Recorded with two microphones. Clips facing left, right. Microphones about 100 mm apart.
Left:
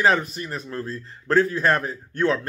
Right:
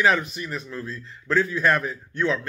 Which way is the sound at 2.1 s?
45° left (ahead or behind).